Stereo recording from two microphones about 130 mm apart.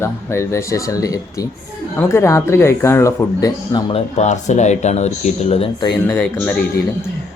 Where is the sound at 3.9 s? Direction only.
60° left (ahead or behind).